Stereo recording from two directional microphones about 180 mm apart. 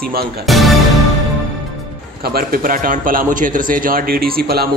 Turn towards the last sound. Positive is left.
turn(degrees=-60)  # may be behind; listen again after turning